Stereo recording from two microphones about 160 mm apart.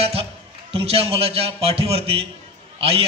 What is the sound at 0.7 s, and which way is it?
A man's voice, 40° right (ahead or behind).